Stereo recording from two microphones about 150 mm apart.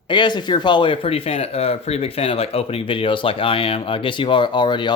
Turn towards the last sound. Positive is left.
turn(degrees=30)  # may be behind; listen again after turning